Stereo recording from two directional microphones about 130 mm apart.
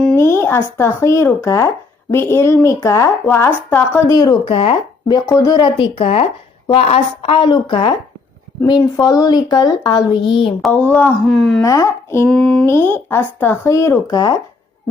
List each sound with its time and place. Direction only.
0.2 s speech: 20° left (ahead or behind)
4.4 s speech: 40° left (ahead or behind)
5.3 s a woman's voice: 25° left (ahead or behind)
10.6 s speech: 10° left (ahead or behind)
11.3 s speech: centre (ahead or behind)
11.6 s speech: 25° left (ahead or behind)
12.3 s speech: 5° left (ahead or behind)
12.6 s speech: 15° left (ahead or behind)